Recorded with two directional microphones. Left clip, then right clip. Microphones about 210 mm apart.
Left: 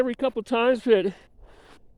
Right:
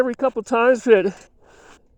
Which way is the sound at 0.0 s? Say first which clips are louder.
Right 5 dB; 10° right (ahead or behind).